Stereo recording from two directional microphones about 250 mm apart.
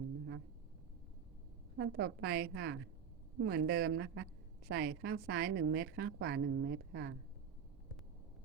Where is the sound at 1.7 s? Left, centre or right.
Right.